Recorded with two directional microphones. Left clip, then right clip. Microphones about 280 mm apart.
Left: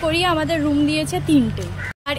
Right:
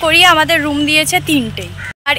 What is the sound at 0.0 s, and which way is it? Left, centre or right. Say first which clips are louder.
Speech: right 10 dB; centre.